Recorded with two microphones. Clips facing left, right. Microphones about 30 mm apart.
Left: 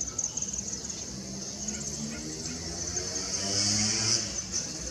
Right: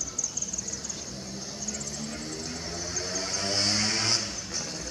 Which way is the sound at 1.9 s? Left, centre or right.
Right.